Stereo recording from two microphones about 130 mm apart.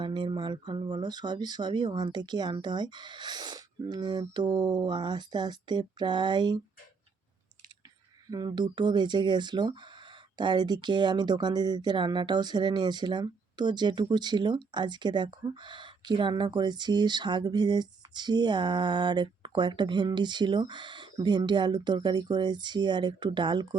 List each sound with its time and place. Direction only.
0.0 s speech: 35° right (ahead or behind)
8.3 s speech: 30° right (ahead or behind)